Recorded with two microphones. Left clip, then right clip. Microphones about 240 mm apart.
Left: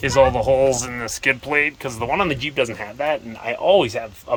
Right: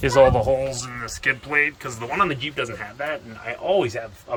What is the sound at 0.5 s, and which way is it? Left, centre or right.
Speech, centre.